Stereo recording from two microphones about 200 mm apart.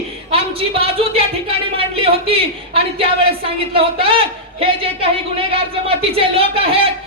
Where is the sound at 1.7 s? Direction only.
25° right (ahead or behind).